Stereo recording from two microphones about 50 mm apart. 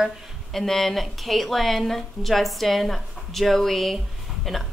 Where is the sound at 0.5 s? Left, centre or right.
Centre.